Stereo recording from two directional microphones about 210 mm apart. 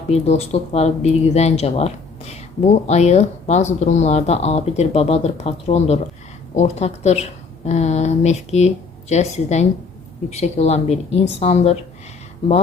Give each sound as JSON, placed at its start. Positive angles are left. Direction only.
{"t": 0.1, "sound": "speech", "side_deg": 30}